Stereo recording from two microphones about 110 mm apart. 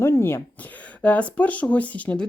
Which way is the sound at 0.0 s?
20° left (ahead or behind).